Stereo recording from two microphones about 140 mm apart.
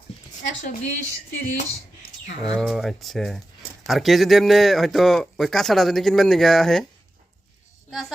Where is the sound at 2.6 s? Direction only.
Centre (ahead or behind).